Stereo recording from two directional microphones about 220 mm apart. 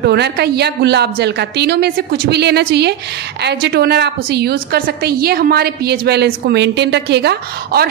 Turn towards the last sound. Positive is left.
turn(degrees=-45)  # may be behind; listen again after turning